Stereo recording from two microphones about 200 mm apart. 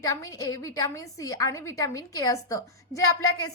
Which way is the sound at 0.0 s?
15° left (ahead or behind).